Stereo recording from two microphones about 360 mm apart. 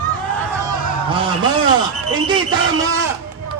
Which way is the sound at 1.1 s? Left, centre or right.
Centre.